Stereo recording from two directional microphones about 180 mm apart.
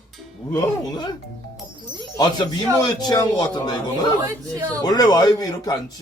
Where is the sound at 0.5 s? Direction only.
25° left (ahead or behind).